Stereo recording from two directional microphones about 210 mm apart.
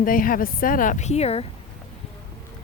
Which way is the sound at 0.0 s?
40° left (ahead or behind).